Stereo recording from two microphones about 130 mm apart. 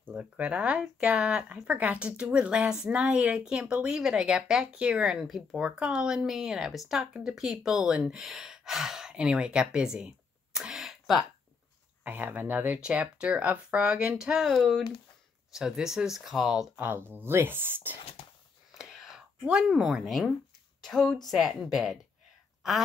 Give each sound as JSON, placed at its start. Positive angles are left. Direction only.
{"t": 0.0, "sound": "speech", "side_deg": -10}
{"t": 12.0, "sound": "speech", "side_deg": -15}
{"t": 16.8, "sound": "speech", "side_deg": -15}
{"t": 18.8, "sound": "a sound", "side_deg": -5}
{"t": 20.8, "sound": "speech", "side_deg": 5}